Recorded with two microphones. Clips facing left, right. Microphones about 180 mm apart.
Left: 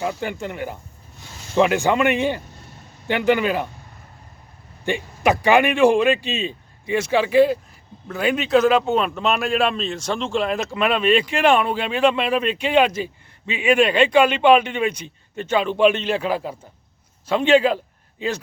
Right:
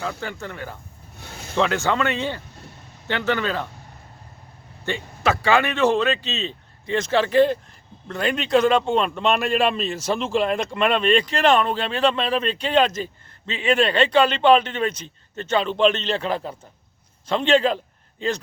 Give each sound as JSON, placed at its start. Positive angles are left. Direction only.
{"t": 0.0, "sound": "a man's voice", "side_deg": 15}
{"t": 1.2, "sound": "a sound", "side_deg": -60}
{"t": 1.5, "sound": "a man's voice", "side_deg": 15}
{"t": 4.9, "sound": "a man's voice", "side_deg": 15}